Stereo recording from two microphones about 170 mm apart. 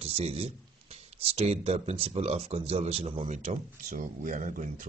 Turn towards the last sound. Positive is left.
turn(degrees=-50)  # may be behind; listen again after turning